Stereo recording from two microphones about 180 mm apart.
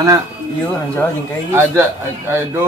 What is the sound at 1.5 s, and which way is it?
Speech, 15° right (ahead or behind).